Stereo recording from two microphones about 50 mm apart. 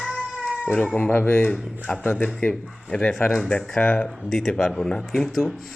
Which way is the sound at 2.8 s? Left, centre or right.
Centre.